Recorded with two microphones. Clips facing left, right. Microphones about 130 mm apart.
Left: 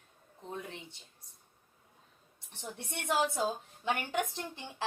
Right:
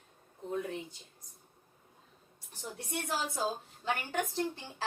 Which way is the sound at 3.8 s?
20° left (ahead or behind).